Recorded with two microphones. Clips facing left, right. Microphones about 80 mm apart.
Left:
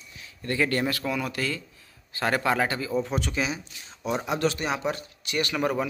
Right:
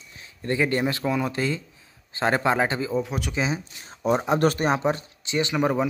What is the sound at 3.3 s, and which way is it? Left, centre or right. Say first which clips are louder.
Speech: right 3 dB; right.